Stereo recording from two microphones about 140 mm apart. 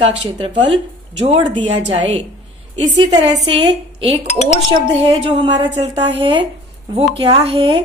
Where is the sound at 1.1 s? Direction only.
35° right (ahead or behind).